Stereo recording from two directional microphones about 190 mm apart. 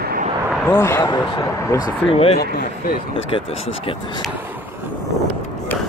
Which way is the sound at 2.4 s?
45° left (ahead or behind).